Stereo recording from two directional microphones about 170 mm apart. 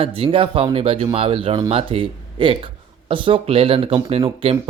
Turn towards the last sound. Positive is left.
turn(degrees=-35)  # may be behind; listen again after turning